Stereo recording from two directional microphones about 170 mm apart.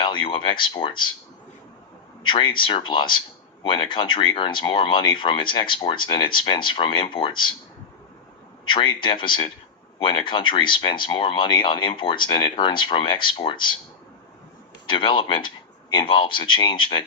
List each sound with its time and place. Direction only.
0.0 s speech: 30° left (ahead or behind)
2.2 s speech: 30° left (ahead or behind)
8.6 s speech: 30° left (ahead or behind)
14.8 s speech: 30° left (ahead or behind)